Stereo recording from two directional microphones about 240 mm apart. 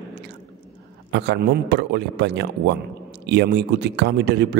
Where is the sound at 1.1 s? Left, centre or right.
Right.